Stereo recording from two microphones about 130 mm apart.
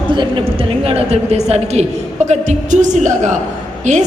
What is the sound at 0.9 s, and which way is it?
A woman's voice, 50° right (ahead or behind).